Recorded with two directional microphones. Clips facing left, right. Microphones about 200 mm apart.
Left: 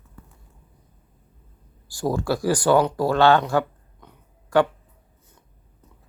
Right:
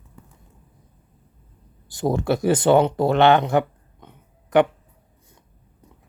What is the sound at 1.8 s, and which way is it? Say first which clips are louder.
Speech: right 2 dB; 20° right (ahead or behind).